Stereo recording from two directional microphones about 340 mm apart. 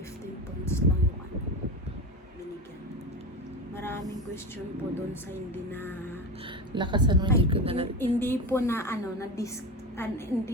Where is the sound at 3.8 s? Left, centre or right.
Centre.